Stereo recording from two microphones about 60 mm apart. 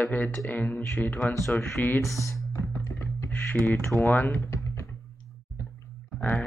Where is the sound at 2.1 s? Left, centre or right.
Left.